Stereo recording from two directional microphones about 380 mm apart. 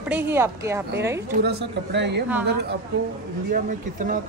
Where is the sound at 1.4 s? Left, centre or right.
Right.